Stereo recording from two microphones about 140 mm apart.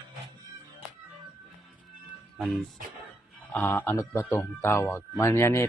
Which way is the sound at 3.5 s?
15° left (ahead or behind).